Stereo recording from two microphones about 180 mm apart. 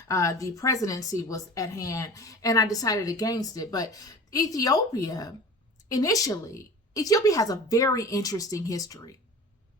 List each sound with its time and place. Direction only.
0.1 s a woman's voice: 20° left (ahead or behind)